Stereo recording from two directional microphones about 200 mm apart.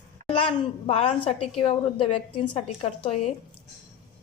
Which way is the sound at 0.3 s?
25° left (ahead or behind).